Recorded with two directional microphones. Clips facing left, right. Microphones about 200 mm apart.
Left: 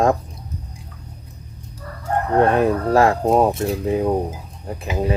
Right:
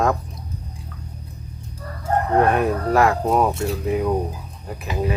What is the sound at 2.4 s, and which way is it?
Speech, 30° left (ahead or behind).